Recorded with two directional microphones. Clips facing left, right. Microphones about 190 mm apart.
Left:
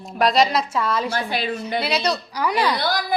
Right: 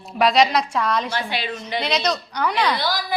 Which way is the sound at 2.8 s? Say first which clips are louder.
Left 2 dB; 50° left (ahead or behind).